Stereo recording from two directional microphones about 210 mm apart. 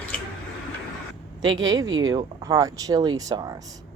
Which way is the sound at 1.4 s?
65° right (ahead or behind).